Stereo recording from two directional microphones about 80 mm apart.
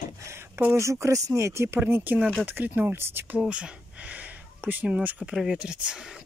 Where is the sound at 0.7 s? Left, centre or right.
Right.